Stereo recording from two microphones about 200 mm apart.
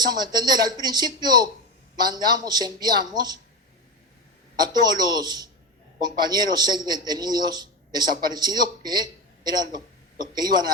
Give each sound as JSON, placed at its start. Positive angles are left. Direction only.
{"t": 0.0, "sound": "a man's voice", "side_deg": -20}
{"t": 4.6, "sound": "a man's voice", "side_deg": -20}